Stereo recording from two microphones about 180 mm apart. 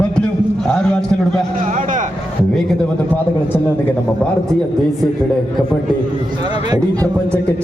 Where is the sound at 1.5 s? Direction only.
45° right (ahead or behind).